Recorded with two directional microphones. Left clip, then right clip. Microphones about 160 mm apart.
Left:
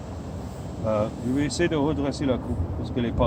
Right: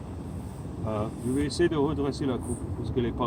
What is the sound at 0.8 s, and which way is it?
Speech, 25° left (ahead or behind).